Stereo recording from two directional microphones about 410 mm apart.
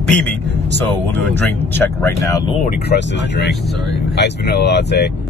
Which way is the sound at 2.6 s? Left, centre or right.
Left.